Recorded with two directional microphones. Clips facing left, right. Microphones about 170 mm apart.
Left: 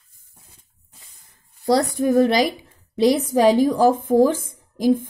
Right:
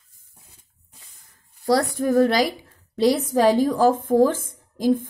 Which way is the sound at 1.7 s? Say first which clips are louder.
Left 2 dB; 20° left (ahead or behind).